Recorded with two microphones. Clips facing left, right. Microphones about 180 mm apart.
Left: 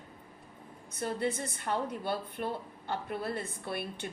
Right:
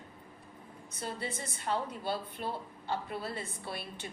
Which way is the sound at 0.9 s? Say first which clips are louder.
Left 6 dB; 55° left (ahead or behind).